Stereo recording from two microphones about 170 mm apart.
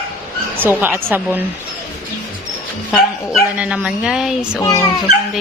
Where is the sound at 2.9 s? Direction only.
Centre (ahead or behind).